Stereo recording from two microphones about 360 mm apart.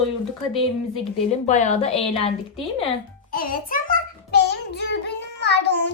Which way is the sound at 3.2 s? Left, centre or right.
Left.